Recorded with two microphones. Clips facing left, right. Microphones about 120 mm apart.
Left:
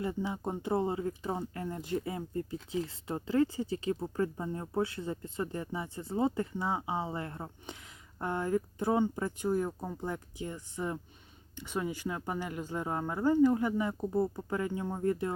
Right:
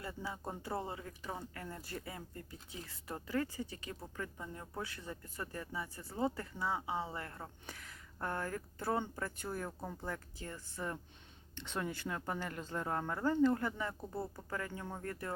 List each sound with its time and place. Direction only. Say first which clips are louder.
0.0 s speech: left 9 dB; 20° left (ahead or behind)